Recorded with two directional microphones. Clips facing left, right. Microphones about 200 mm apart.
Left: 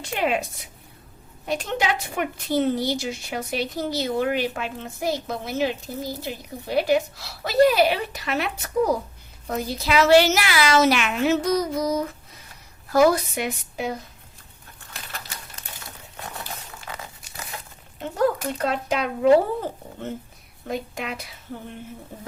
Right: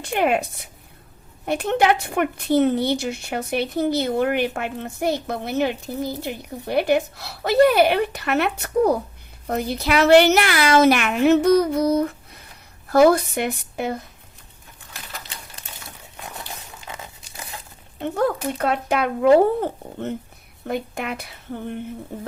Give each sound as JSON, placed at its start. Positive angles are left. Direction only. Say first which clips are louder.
{"t": 0.0, "sound": "a woman's voice", "louder": "right 4 dB", "side_deg": -55}
{"t": 18.6, "sound": "a woman's voice", "louder": "right 3 dB", "side_deg": -55}